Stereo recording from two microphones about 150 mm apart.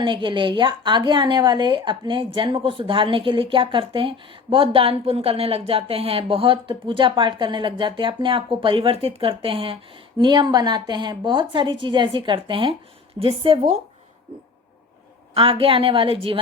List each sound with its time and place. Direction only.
0.0 s a woman's voice: 35° right (ahead or behind)
15.4 s a woman's voice: 40° right (ahead or behind)